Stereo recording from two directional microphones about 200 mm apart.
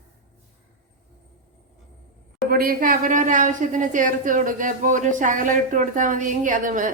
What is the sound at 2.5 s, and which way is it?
A woman's voice, 50° right (ahead or behind).